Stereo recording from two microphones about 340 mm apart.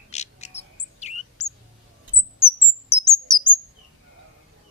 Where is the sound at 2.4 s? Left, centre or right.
Centre.